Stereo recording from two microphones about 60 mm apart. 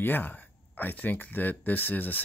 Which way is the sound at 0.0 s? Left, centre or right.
Left.